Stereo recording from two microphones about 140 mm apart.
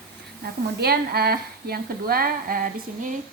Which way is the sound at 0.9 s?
90° right.